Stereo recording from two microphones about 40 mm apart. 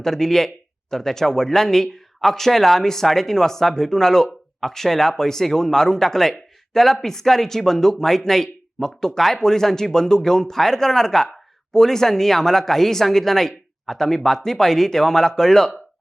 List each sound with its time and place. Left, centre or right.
0.0 s speech: centre